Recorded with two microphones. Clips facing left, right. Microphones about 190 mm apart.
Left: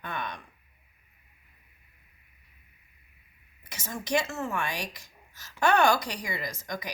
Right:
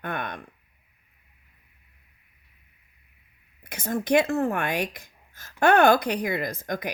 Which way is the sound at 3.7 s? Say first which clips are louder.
Right 8 dB; 55° right (ahead or behind).